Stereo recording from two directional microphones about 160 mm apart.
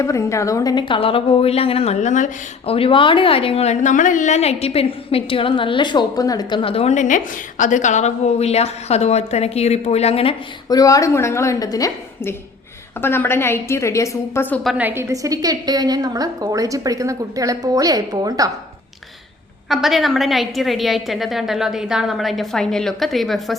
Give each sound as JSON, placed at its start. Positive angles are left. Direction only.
{"t": 0.0, "sound": "a woman's voice", "side_deg": 20}
{"t": 2.6, "sound": "a woman's voice", "side_deg": 35}
{"t": 10.7, "sound": "a woman's voice", "side_deg": 20}
{"t": 14.8, "sound": "a woman's voice", "side_deg": -15}
{"t": 19.6, "sound": "a woman's voice", "side_deg": 0}